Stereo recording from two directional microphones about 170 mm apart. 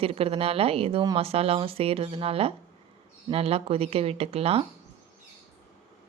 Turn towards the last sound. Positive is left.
turn(degrees=-35)  # may be behind; listen again after turning